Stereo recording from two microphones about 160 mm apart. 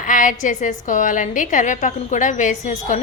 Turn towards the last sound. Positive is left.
turn(degrees=50)  # may be behind; listen again after turning